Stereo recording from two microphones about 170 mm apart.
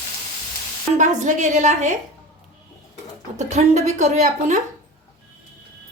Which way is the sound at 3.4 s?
40° right (ahead or behind).